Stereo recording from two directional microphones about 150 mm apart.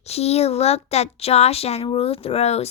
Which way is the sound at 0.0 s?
45° left (ahead or behind).